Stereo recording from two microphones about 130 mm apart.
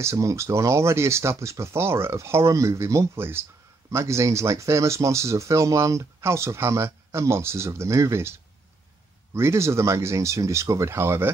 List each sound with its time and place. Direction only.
0.0 s speech: 25° right (ahead or behind)